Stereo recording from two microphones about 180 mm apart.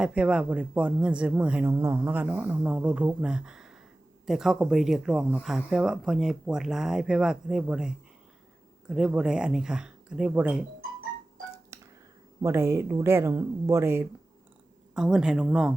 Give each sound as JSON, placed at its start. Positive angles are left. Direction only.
{"t": 0.0, "sound": "speech", "side_deg": -5}
{"t": 11.7, "sound": "a sound", "side_deg": -15}
{"t": 12.4, "sound": "speech", "side_deg": -15}